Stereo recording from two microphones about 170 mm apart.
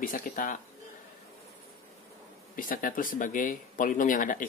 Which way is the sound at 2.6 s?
55° left (ahead or behind).